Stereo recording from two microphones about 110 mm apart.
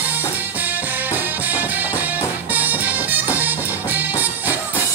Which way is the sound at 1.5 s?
15° right (ahead or behind).